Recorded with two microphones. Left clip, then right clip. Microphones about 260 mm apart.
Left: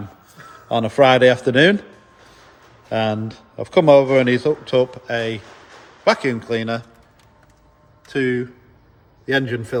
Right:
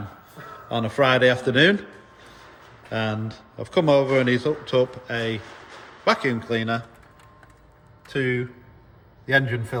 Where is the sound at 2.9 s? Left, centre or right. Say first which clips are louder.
Left 6 dB; centre.